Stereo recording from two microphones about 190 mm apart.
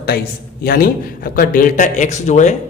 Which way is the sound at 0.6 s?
50° left (ahead or behind).